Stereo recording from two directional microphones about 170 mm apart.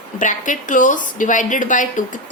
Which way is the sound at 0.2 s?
50° left (ahead or behind).